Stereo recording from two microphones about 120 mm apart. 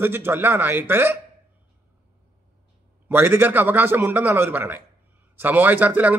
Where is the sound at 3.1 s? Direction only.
15° right (ahead or behind).